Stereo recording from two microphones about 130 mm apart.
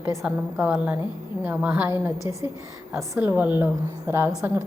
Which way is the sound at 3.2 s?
15° right (ahead or behind).